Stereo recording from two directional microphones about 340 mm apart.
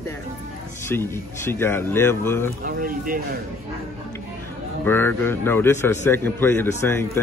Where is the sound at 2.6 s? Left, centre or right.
Right.